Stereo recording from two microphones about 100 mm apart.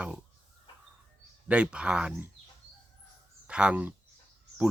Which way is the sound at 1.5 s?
10° right (ahead or behind).